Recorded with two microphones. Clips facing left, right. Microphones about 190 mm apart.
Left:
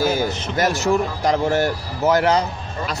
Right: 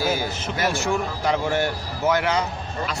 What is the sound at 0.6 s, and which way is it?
Speech, 40° left (ahead or behind).